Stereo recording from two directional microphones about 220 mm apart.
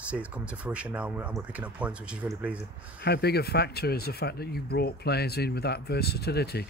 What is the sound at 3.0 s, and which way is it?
Speech, 45° left (ahead or behind).